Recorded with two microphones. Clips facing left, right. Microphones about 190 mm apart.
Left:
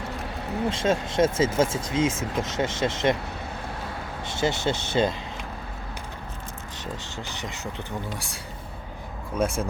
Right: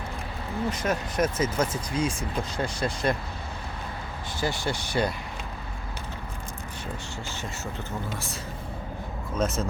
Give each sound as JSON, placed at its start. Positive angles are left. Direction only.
{"t": 0.7, "sound": "speech", "side_deg": 25}
{"t": 4.3, "sound": "speech", "side_deg": 25}
{"t": 7.3, "sound": "speech", "side_deg": 15}
{"t": 9.4, "sound": "speech", "side_deg": 10}